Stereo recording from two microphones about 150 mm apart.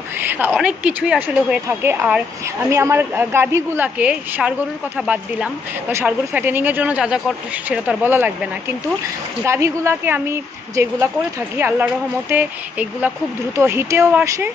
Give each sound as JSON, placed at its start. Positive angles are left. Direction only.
{"t": 0.2, "sound": "a woman's voice", "side_deg": -10}
{"t": 9.4, "sound": "a woman's voice", "side_deg": -20}